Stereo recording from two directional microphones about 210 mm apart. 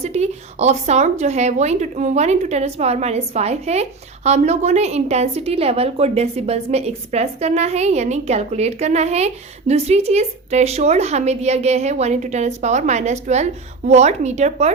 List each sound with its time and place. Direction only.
0.0 s a woman's voice: 30° right (ahead or behind)